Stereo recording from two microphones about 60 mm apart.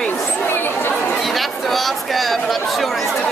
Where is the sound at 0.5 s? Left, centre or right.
Left.